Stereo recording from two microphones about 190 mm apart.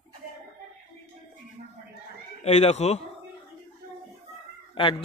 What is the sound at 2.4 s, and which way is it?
Speech, 35° left (ahead or behind).